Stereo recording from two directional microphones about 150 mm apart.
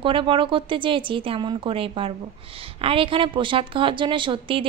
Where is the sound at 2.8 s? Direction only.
35° right (ahead or behind).